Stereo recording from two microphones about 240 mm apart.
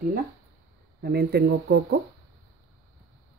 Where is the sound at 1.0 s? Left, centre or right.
Right.